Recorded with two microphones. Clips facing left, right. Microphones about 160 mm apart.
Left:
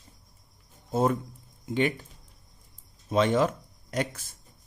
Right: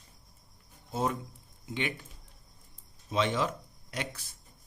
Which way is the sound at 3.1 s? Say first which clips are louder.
Left 6 dB; 45° left (ahead or behind).